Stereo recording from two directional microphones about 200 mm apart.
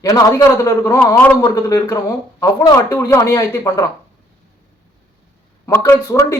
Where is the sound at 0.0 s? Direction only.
15° left (ahead or behind).